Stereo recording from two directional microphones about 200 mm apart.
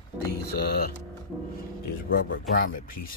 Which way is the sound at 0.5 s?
50° left (ahead or behind).